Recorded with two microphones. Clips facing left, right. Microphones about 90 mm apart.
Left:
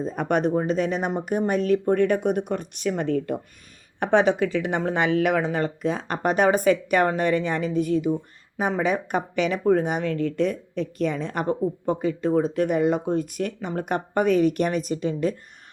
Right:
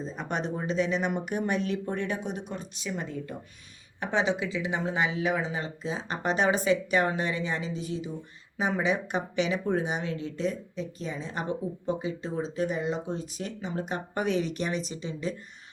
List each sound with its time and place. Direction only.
0.0 s speech: 55° left (ahead or behind)
4.0 s speech: 55° left (ahead or behind)